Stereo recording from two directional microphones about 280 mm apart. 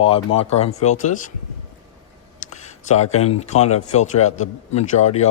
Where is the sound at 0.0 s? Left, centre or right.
Centre.